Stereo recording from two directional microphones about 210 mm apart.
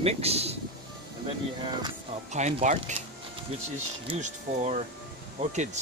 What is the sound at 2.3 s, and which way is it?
Speech, 35° right (ahead or behind).